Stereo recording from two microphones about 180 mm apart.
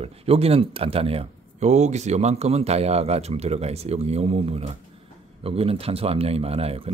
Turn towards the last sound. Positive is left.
turn(degrees=-35)  # may be behind; listen again after turning